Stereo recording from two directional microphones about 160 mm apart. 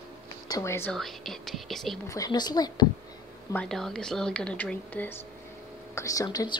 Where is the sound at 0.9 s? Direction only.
Centre (ahead or behind).